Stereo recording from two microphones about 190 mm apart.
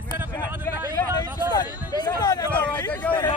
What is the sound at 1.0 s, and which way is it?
Vehicle, 20° left (ahead or behind).